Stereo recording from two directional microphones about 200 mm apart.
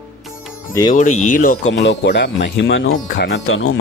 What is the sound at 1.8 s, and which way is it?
Speech, 65° left (ahead or behind).